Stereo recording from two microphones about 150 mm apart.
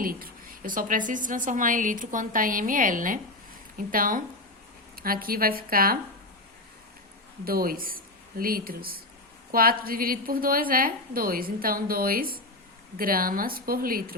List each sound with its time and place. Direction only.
0.0 s a woman's voice: 75° right (ahead or behind)
7.4 s a woman's voice: 80° right